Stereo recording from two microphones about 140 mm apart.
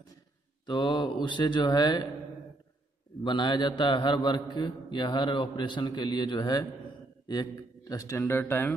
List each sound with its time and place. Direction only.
0.7 s a man's voice: 35° left (ahead or behind)
3.3 s a man's voice: 35° left (ahead or behind); by 8.7 s 15° left (ahead or behind)